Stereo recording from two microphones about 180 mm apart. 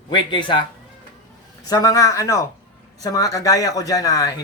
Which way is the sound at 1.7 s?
20° left (ahead or behind).